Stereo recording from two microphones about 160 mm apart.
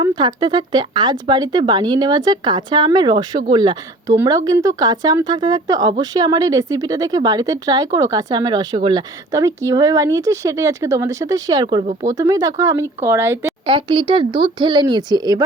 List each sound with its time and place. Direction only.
0.0 s speech: 25° right (ahead or behind)
13.7 s speech: 30° right (ahead or behind)